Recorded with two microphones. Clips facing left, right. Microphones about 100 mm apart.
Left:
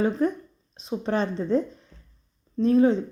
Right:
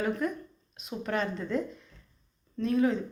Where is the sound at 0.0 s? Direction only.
30° left (ahead or behind).